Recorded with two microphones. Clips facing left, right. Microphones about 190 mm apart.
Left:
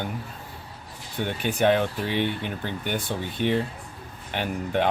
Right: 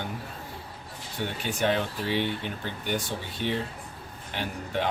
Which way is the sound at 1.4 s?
55° left (ahead or behind).